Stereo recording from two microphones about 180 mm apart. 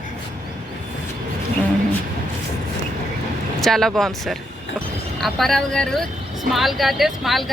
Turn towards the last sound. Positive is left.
turn(degrees=0)  # may be behind; listen again after turning